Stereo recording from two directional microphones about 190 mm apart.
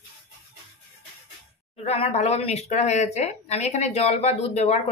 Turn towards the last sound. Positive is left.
turn(degrees=35)  # may be behind; listen again after turning